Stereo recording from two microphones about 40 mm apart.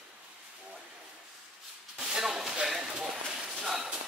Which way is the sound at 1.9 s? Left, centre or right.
Centre.